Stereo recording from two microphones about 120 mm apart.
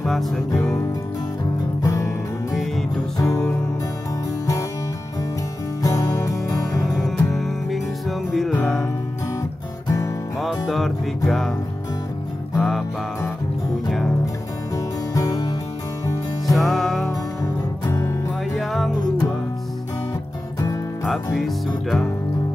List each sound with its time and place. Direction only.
0.0 s music: centre (ahead or behind)
1.8 s music: 25° left (ahead or behind)
3.2 s music: 25° left (ahead or behind)
5.8 s music: 30° left (ahead or behind)
6.9 s music: centre (ahead or behind)
9.8 s music: 25° left (ahead or behind)
10.7 s music: centre (ahead or behind)
12.5 s music: centre (ahead or behind)
15.1 s music: 30° left (ahead or behind)
16.5 s music: centre (ahead or behind)
17.8 s music: 25° left (ahead or behind)
18.6 s music: centre (ahead or behind)
21.0 s music: centre (ahead or behind)